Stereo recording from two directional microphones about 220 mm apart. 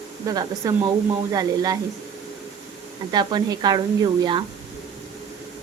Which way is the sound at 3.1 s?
20° right (ahead or behind).